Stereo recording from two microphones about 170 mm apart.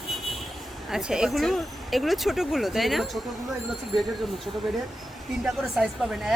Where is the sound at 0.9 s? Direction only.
5° right (ahead or behind).